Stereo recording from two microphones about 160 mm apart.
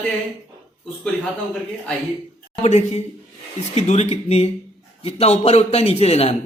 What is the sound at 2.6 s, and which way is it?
A man's voice, 45° left (ahead or behind).